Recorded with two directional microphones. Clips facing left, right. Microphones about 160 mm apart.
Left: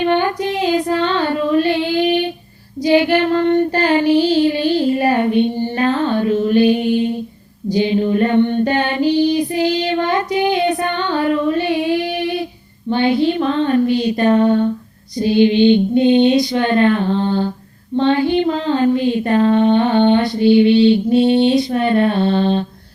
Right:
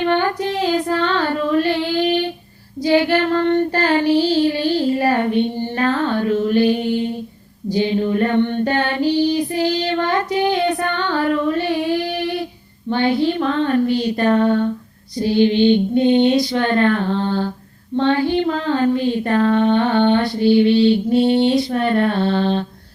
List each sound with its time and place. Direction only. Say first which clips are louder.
0.0 s child singing: left 2 dB; 15° left (ahead or behind)
7.7 s female singing: left 2 dB; 15° left (ahead or behind)
12.9 s child singing: left 2 dB; 15° left (ahead or behind)
15.2 s female singing: left 2 dB; 15° left (ahead or behind)
17.9 s child singing: left 2 dB; 20° left (ahead or behind)